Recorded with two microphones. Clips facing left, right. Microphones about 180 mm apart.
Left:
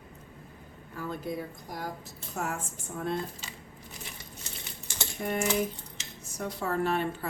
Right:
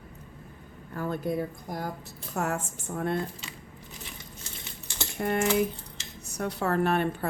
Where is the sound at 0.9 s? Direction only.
55° right (ahead or behind).